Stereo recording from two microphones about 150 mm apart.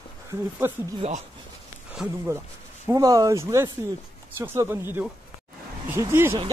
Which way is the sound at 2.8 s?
25° right (ahead or behind).